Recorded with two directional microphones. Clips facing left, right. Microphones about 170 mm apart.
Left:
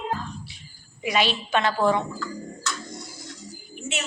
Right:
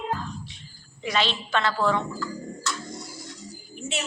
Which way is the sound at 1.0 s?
10° left (ahead or behind).